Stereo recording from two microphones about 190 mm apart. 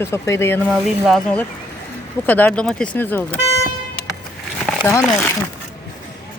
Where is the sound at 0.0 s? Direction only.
15° left (ahead or behind).